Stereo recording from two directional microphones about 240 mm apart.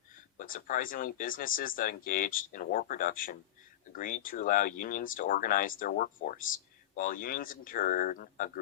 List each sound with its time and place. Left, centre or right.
0.1 s speech: left